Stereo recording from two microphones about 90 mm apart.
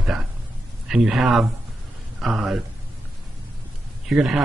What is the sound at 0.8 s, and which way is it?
Speech, 5° right (ahead or behind).